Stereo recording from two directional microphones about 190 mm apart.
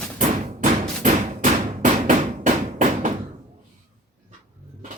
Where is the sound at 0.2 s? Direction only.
40° right (ahead or behind).